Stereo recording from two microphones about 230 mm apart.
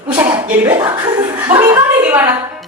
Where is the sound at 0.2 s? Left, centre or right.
Centre.